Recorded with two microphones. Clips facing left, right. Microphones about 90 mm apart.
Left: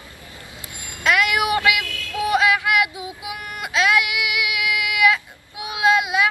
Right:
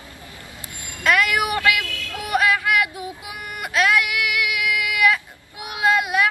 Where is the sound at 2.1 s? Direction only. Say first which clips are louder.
Left 2 dB; 20° left (ahead or behind).